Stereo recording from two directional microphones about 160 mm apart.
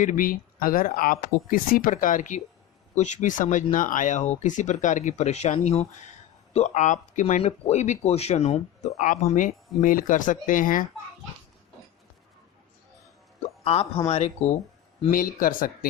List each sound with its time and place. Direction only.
0.0 s speech: 55° left (ahead or behind)
13.7 s speech: 40° left (ahead or behind)
15.1 s speech: 60° left (ahead or behind)